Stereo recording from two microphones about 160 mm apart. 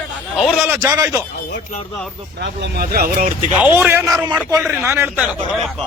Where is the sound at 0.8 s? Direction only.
20° right (ahead or behind).